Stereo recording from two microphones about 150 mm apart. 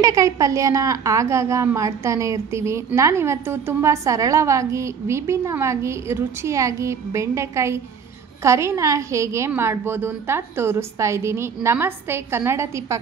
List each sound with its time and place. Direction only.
0.0 s a woman's voice: 20° right (ahead or behind)